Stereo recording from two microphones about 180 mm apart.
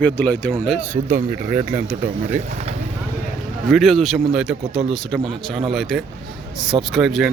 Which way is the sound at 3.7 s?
Centre (ahead or behind).